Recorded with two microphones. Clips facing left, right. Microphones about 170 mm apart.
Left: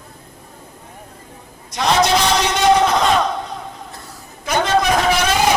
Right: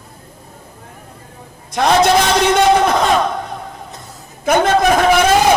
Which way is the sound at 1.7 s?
55° right (ahead or behind).